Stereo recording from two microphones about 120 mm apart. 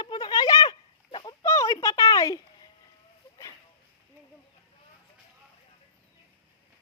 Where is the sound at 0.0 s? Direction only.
35° left (ahead or behind).